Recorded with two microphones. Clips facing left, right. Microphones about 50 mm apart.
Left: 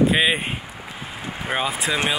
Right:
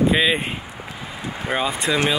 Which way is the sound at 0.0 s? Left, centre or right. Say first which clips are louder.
Even; centre.